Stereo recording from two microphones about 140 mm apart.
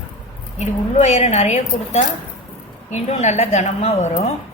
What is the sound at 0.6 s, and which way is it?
A woman's voice, 55° left (ahead or behind).